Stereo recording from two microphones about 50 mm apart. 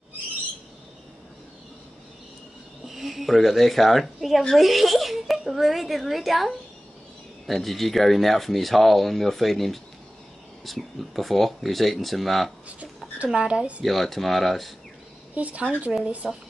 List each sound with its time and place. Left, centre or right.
2.9 s speech: centre
13.3 s speech: centre
13.8 s speech: centre
15.3 s speech: right
16.2 s speech: centre